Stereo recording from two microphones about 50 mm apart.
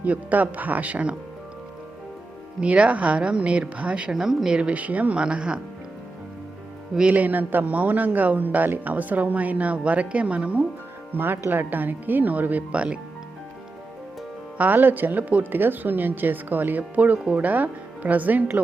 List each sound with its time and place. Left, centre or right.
0.0 s a woman's voice: right
2.6 s speech: right
4.1 s speech: centre
6.9 s speech: centre
7.2 s a woman's voice: right
11.1 s a woman's voice: right
14.6 s a woman's voice: right